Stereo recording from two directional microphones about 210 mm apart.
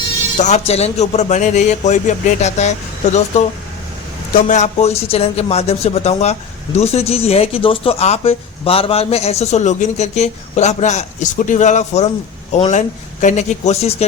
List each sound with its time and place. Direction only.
0.3 s speech: 35° left (ahead or behind)
4.4 s a man's voice: 35° left (ahead or behind)